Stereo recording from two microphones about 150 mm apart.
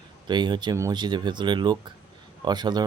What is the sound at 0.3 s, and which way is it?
Speech, 30° right (ahead or behind).